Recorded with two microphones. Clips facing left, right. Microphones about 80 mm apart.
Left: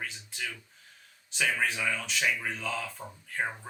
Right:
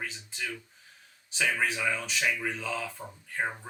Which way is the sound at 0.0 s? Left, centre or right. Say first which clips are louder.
Right 1 dB; centre.